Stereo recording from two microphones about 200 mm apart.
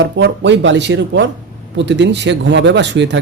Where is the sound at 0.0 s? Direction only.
60° right (ahead or behind).